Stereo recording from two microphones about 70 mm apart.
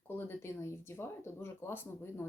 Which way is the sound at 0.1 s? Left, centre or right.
Left.